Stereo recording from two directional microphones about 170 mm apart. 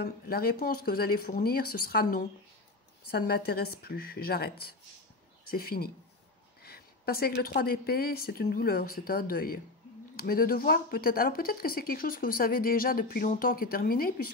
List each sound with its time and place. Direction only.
0.0 s speech: 65° left (ahead or behind)